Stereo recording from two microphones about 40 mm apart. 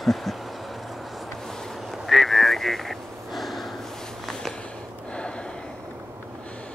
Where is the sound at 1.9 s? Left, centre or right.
Centre.